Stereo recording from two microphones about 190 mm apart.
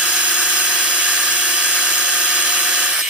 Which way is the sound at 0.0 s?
5° right (ahead or behind).